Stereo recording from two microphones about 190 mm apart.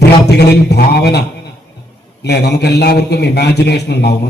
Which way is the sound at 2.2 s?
60° left (ahead or behind).